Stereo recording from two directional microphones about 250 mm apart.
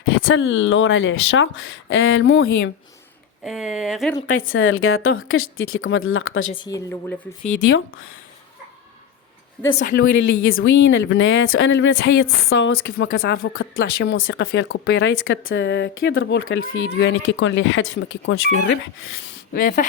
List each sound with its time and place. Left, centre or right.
0.3 s speech: left
3.4 s speech: centre
4.4 s speech: left
6.5 s speech: centre
7.7 s speech: left
10.4 s speech: left
19.5 s speech: left